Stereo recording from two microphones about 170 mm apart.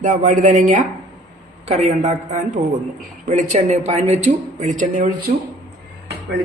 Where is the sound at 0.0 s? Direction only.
50° right (ahead or behind).